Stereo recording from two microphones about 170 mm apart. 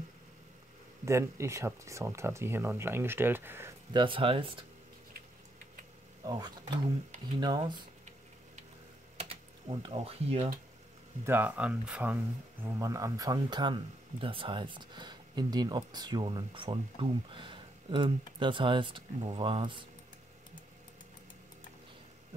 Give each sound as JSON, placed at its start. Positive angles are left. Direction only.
{"t": 1.0, "sound": "speech", "side_deg": -15}
{"t": 3.9, "sound": "speech", "side_deg": -30}
{"t": 6.2, "sound": "speech", "side_deg": -25}
{"t": 9.3, "sound": "speech", "side_deg": -30}
{"t": 11.2, "sound": "speech", "side_deg": -10}
{"t": 12.6, "sound": "speech", "side_deg": -20}